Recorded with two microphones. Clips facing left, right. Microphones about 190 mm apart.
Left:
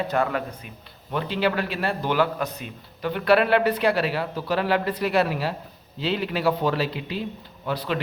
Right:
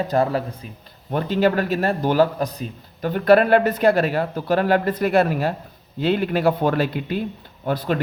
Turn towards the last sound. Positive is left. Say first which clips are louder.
# right 5 dB
turn(degrees=-50)  # may be behind; listen again after turning